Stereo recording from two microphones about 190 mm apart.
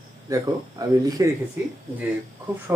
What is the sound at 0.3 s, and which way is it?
Speech, 20° right (ahead or behind).